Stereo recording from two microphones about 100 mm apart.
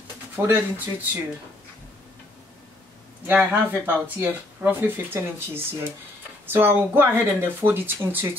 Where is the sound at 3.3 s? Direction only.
20° right (ahead or behind).